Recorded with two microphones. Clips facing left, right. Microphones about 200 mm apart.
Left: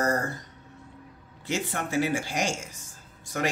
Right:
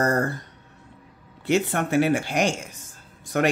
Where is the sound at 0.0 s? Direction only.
60° right (ahead or behind).